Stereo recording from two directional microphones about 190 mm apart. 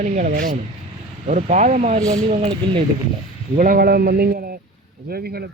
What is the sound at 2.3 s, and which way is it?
Speech, 30° right (ahead or behind).